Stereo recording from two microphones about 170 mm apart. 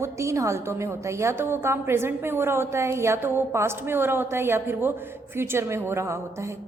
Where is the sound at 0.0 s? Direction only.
15° right (ahead or behind).